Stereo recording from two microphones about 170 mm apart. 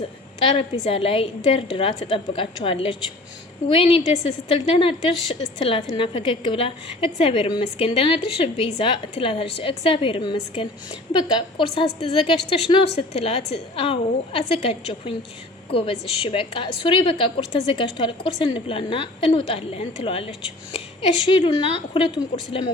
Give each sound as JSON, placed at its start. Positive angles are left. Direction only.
{"t": 0.4, "sound": "a woman's voice", "side_deg": 30}